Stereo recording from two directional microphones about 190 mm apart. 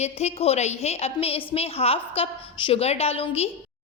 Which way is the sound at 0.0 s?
35° left (ahead or behind).